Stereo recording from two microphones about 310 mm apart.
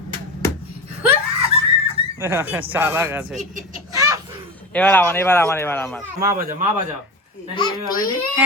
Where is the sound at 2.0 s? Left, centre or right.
Centre.